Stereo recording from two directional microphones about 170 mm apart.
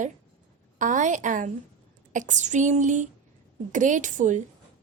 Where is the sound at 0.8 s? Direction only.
50° right (ahead or behind).